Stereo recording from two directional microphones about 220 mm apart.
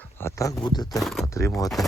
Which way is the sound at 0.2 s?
15° left (ahead or behind).